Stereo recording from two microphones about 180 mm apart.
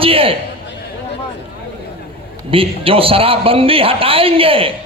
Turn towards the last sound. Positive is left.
turn(degrees=-30)  # may be behind; listen again after turning